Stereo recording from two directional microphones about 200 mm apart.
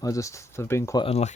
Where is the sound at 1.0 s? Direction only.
30° left (ahead or behind).